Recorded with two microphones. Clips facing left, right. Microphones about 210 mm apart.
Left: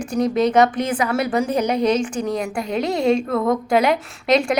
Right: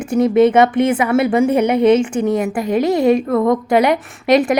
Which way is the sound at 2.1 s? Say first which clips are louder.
Right 6 dB; 25° right (ahead or behind).